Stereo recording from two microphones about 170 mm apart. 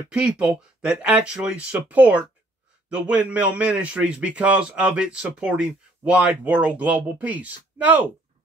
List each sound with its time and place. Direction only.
0.1 s a man's voice: 5° right (ahead or behind)